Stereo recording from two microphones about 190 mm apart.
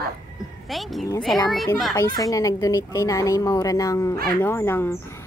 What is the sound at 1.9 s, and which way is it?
Speech, 20° left (ahead or behind).